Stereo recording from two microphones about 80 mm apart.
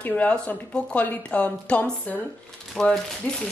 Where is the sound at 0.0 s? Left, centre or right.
Centre.